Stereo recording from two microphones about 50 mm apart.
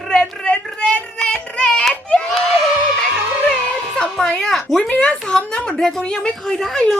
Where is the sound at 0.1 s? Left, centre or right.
Centre.